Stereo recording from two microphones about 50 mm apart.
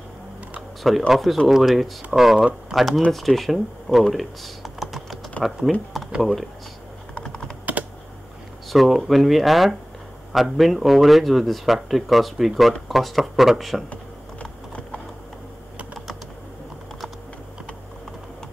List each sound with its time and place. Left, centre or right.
0.6 s speech: centre
7.7 s typing: right
8.6 s speech: centre